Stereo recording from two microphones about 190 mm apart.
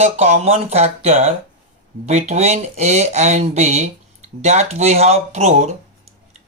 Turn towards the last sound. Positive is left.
turn(degrees=-35)  # may be behind; listen again after turning